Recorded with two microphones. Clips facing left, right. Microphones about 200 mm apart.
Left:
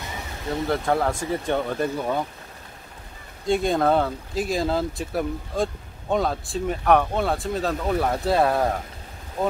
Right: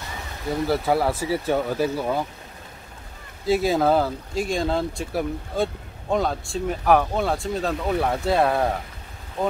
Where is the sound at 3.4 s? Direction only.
5° right (ahead or behind).